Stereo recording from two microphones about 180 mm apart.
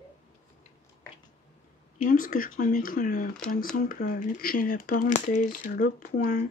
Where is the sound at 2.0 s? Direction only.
50° left (ahead or behind).